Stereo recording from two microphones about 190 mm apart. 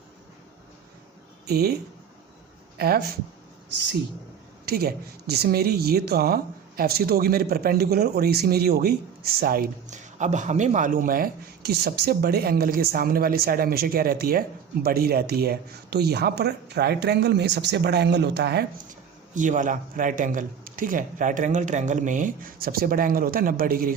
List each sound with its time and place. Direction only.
1.5 s speech: 55° right (ahead or behind)
4.6 s speech: 55° right (ahead or behind)
19.3 s speech: 40° right (ahead or behind)